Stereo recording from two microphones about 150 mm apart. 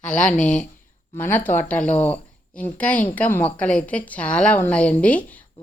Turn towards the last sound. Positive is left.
turn(degrees=10)  # may be behind; listen again after turning